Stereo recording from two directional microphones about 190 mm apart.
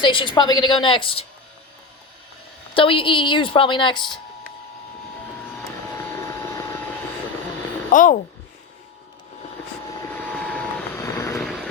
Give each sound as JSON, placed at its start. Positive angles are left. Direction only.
{"t": 0.0, "sound": "a woman's voice", "side_deg": 25}
{"t": 2.7, "sound": "a woman's voice", "side_deg": 30}
{"t": 5.9, "sound": "vehicle", "side_deg": 15}
{"t": 7.9, "sound": "speech", "side_deg": 45}
{"t": 10.0, "sound": "vehicle", "side_deg": 10}
{"t": 11.3, "sound": "vehicle", "side_deg": 0}